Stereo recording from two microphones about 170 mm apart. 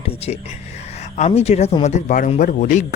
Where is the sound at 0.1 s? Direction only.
35° left (ahead or behind).